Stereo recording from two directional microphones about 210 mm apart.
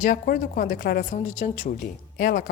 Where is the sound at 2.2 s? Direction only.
45° left (ahead or behind).